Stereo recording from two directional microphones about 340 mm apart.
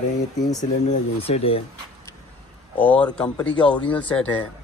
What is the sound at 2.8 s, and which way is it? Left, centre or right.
Speech, centre.